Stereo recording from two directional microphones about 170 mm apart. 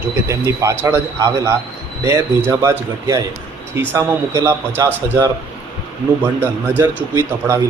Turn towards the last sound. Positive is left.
turn(degrees=-15)  # may be behind; listen again after turning